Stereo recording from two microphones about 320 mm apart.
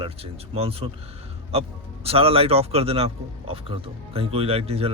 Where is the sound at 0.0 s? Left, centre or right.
Centre.